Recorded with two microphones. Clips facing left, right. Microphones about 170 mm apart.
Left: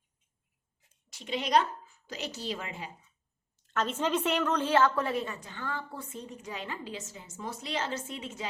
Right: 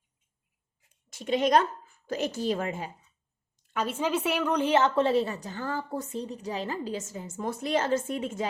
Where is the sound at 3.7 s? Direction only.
10° right (ahead or behind).